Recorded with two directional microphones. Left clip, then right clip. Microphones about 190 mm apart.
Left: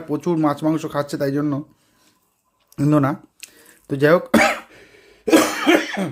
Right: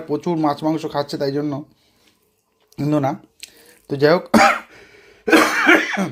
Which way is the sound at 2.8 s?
30° left (ahead or behind).